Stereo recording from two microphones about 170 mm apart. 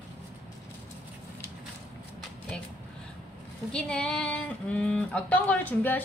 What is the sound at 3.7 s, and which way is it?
Speech, 5° left (ahead or behind).